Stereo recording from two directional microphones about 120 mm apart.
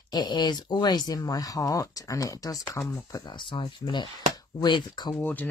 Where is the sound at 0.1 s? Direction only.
35° left (ahead or behind).